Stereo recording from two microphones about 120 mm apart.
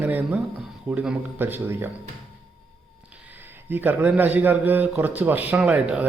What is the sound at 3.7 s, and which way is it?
A man's voice, 15° right (ahead or behind).